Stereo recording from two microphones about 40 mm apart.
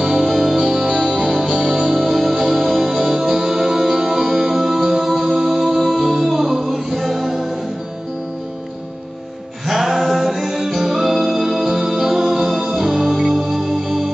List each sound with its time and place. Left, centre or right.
0.0 s music: centre
9.7 s music: centre